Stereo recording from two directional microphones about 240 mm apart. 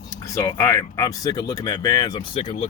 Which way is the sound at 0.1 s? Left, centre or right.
Centre.